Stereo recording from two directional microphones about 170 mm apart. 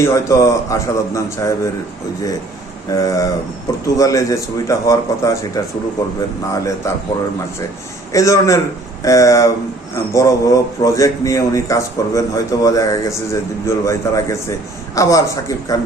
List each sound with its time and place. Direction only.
0.0 s a man's voice: 15° left (ahead or behind)
2.9 s a man's voice: 20° left (ahead or behind)
8.1 s a man's voice: 20° left (ahead or behind)